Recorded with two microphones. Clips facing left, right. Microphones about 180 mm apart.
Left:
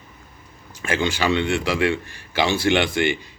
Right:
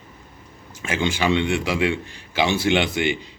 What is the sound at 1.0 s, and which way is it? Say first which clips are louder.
A man's voice: right 1 dB; 20° right (ahead or behind).